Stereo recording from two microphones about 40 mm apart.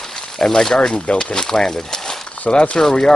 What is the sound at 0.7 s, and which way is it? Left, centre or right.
Speech, left.